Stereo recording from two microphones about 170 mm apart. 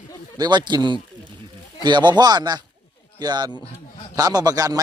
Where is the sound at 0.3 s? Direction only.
25° right (ahead or behind).